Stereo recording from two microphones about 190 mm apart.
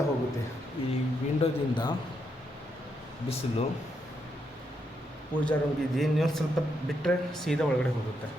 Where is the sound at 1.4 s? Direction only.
25° left (ahead or behind).